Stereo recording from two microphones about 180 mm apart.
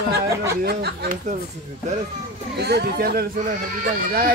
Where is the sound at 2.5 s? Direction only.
65° right (ahead or behind).